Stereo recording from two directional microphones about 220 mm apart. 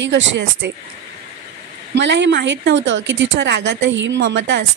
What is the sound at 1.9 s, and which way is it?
A woman's voice, 55° right (ahead or behind).